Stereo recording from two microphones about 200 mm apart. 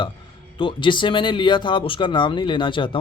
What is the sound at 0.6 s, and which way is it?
Speech, 25° left (ahead or behind).